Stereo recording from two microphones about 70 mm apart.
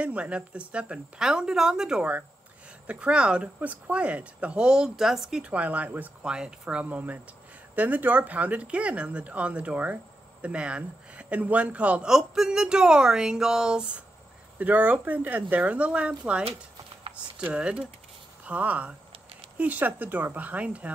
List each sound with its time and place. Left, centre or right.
0.0 s speech: centre
12.1 s speech: centre
14.6 s speech: right